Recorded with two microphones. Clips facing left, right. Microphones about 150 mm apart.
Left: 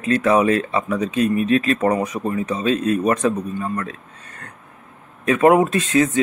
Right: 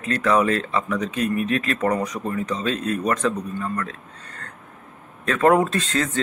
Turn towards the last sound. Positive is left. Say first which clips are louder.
# left 6 dB
turn(degrees=15)  # may be behind; listen again after turning